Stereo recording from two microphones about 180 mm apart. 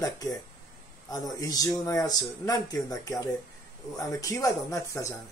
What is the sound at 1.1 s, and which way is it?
Speech, 20° left (ahead or behind).